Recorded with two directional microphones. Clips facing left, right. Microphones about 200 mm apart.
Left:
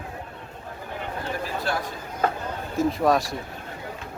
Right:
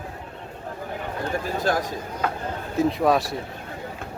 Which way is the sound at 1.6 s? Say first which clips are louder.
Right 6 dB; 45° right (ahead or behind).